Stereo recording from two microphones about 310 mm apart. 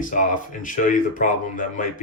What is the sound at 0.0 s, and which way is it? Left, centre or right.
Speech, left.